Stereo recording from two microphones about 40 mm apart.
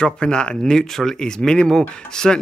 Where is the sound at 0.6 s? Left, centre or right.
Centre.